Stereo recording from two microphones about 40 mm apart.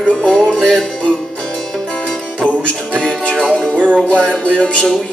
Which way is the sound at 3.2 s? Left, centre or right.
Left.